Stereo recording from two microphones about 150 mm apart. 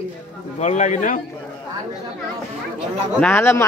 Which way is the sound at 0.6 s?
50° left (ahead or behind).